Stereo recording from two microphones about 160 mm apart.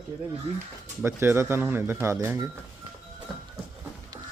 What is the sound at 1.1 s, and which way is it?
A man's voice, 15° right (ahead or behind).